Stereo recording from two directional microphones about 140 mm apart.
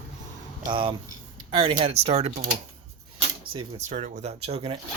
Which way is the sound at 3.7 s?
60° right (ahead or behind).